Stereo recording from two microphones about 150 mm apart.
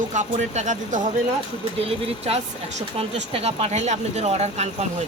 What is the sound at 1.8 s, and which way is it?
Speech, 45° right (ahead or behind).